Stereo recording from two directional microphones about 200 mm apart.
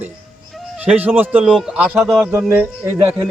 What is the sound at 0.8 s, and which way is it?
Speech, 5° right (ahead or behind).